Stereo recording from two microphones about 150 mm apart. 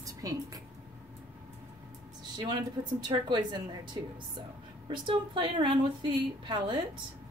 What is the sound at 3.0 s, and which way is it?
Speech, 30° right (ahead or behind).